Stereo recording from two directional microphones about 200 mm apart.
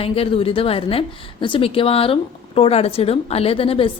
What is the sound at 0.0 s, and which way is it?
Speech, 30° left (ahead or behind).